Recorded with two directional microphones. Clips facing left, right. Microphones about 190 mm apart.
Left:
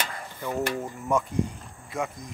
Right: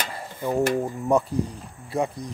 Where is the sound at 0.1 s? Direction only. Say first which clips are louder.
Right 5 dB; 30° right (ahead or behind).